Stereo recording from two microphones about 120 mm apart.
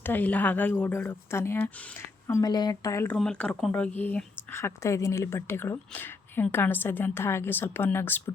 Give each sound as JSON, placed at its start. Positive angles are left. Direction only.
{"t": 0.0, "sound": "speech", "side_deg": 15}
{"t": 2.5, "sound": "speech", "side_deg": 35}
{"t": 3.2, "sound": "speech", "side_deg": 5}